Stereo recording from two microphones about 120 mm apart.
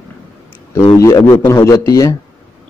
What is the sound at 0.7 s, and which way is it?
A man's voice, 20° left (ahead or behind).